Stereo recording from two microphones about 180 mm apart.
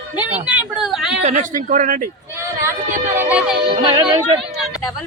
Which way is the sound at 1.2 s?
40° right (ahead or behind).